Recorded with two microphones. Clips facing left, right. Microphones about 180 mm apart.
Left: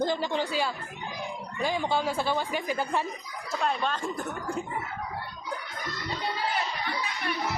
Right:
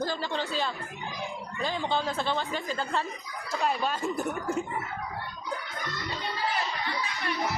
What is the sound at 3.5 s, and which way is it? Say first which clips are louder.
Speech: even; 5° right (ahead or behind).